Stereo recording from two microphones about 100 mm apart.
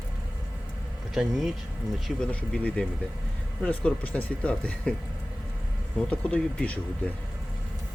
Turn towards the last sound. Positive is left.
turn(degrees=15)  # may be behind; listen again after turning